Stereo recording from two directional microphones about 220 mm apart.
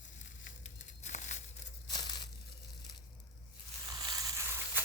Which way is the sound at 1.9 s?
20° left (ahead or behind).